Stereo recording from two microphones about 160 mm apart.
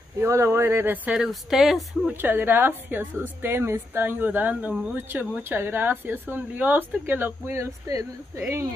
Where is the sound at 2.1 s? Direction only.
15° right (ahead or behind).